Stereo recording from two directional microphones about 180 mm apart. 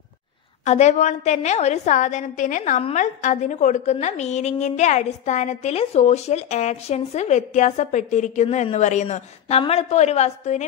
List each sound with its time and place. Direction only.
0.7 s a woman's voice: 40° left (ahead or behind)